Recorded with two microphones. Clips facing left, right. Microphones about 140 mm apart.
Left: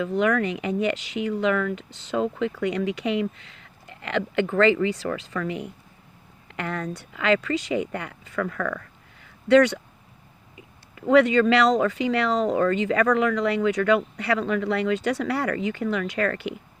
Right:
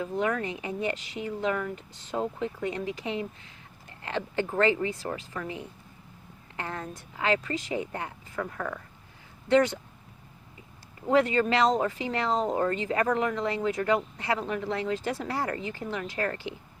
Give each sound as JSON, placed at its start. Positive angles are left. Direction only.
{"t": 0.0, "sound": "speech", "side_deg": 80}
{"t": 11.1, "sound": "speech", "side_deg": 90}